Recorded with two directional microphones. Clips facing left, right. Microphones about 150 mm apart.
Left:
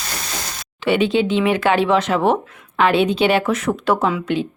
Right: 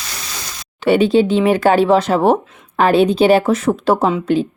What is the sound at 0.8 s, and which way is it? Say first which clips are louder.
Speech: right 5 dB; 40° right (ahead or behind).